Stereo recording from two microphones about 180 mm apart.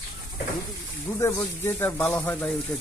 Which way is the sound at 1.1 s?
15° left (ahead or behind).